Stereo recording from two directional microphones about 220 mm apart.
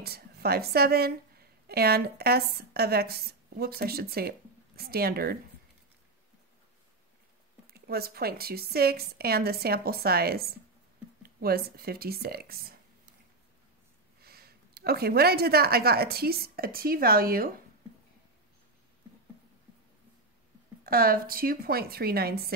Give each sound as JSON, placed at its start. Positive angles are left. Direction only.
{"t": 0.0, "sound": "a woman's voice", "side_deg": -45}
{"t": 7.6, "sound": "a woman's voice", "side_deg": -45}
{"t": 14.2, "sound": "a woman's voice", "side_deg": -45}
{"t": 20.8, "sound": "a woman's voice", "side_deg": -40}